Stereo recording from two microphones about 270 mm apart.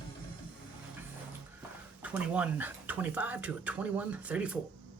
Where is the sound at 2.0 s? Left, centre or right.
Centre.